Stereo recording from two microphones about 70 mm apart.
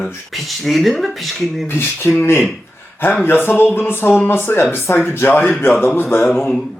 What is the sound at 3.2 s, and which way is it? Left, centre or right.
Speech, left.